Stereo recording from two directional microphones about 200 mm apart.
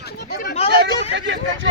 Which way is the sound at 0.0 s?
50° left (ahead or behind).